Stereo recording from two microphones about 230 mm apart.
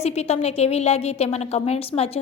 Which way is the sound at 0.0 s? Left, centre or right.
Left.